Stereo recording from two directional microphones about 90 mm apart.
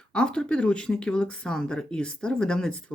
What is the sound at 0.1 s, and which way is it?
Speech, 10° left (ahead or behind).